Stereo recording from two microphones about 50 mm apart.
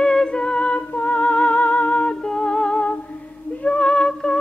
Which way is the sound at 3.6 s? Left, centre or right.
Left.